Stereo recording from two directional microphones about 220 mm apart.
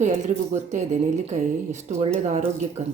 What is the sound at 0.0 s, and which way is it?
Speech, 30° right (ahead or behind).